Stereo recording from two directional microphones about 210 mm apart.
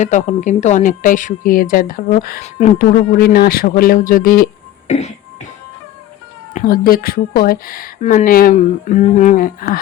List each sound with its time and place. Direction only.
0.0 s speech: 35° left (ahead or behind)
2.7 s speech: 45° left (ahead or behind)
4.9 s speech: 30° left (ahead or behind)
6.5 s speech: 45° left (ahead or behind)